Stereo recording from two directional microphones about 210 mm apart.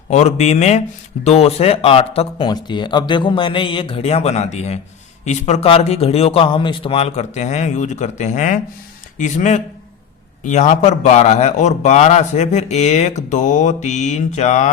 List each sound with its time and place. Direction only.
0.1 s a man's voice: 35° left (ahead or behind)